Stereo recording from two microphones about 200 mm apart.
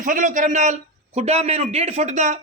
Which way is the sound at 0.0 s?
40° right (ahead or behind).